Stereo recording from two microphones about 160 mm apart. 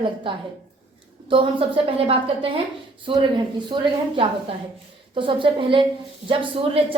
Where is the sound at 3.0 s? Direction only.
30° right (ahead or behind).